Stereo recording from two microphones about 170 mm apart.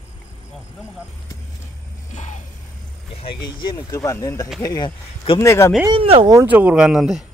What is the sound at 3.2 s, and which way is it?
Speech, 30° left (ahead or behind).